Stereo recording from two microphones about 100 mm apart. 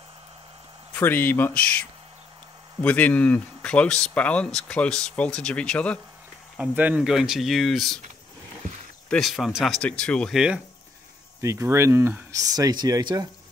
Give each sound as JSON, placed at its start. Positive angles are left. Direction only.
{"t": 0.9, "sound": "speech", "side_deg": 20}
{"t": 6.6, "sound": "speech", "side_deg": -15}
{"t": 7.0, "sound": "speech", "side_deg": -5}
{"t": 9.2, "sound": "speech", "side_deg": 0}
{"t": 9.8, "sound": "speech", "side_deg": 10}
{"t": 10.3, "sound": "speech", "side_deg": -5}
{"t": 11.4, "sound": "speech", "side_deg": -30}